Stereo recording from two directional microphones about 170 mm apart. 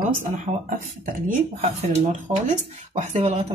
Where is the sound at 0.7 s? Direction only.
55° right (ahead or behind).